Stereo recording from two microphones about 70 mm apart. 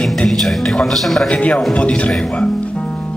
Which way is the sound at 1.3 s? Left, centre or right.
Centre.